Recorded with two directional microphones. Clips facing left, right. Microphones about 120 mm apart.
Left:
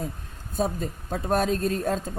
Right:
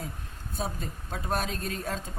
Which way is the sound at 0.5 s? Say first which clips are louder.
Left 8 dB; 45° left (ahead or behind).